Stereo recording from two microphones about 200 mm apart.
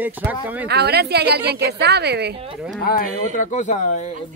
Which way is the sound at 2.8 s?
45° left (ahead or behind).